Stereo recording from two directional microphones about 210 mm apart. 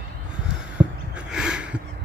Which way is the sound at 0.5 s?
5° right (ahead or behind).